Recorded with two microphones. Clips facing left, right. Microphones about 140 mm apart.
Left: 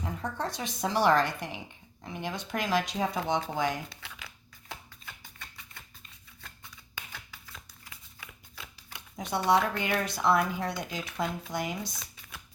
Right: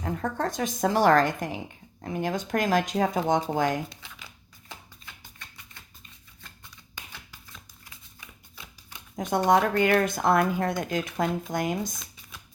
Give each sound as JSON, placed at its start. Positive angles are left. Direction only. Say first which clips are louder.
{"t": 0.0, "sound": "speech", "louder": "right 5 dB", "side_deg": -50}
{"t": 9.1, "sound": "speech", "louder": "right 4 dB", "side_deg": -45}